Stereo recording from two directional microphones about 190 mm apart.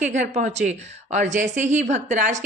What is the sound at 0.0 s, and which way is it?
Speech, 40° right (ahead or behind).